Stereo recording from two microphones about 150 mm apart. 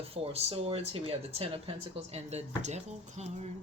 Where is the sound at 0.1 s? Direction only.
40° right (ahead or behind).